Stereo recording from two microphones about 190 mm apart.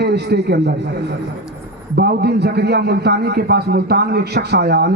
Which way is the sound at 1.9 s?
60° right (ahead or behind).